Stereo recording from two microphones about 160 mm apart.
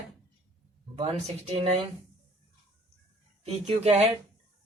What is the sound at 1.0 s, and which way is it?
Speech, 40° right (ahead or behind).